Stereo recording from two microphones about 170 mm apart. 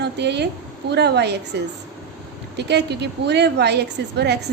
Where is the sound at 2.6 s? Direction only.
80° right.